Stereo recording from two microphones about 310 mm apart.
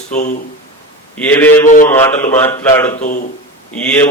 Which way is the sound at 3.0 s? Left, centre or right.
Left.